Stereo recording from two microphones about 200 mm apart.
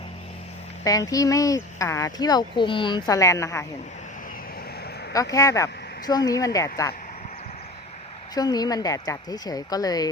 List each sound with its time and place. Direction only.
0.9 s speech: 15° left (ahead or behind)
5.1 s speech: 15° left (ahead or behind)
8.4 s speech: 20° left (ahead or behind)